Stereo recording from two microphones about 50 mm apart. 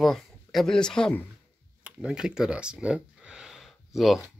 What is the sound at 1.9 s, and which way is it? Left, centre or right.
Speech, centre.